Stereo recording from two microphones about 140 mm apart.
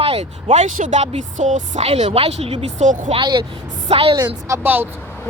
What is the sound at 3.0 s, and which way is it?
Speech, 35° right (ahead or behind).